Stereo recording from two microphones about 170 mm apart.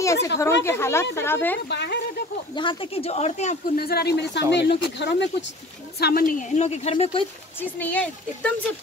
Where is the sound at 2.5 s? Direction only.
30° left (ahead or behind).